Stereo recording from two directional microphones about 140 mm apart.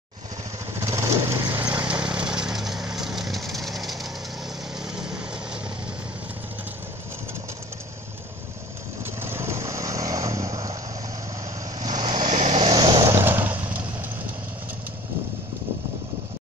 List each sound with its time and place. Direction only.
0.7 s vehicle: 20° right (ahead or behind); by 5.6 s 5° right (ahead or behind)
9.0 s vehicle: 15° right (ahead or behind)
12.0 s vehicle: 35° right (ahead or behind)
12.3 s vehicle: 55° right (ahead or behind)
12.7 s vehicle: 30° right (ahead or behind)
13.1 s vehicle: 15° right (ahead or behind)